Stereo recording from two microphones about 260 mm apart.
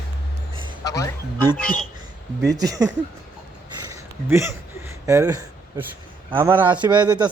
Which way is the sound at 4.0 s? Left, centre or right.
Centre.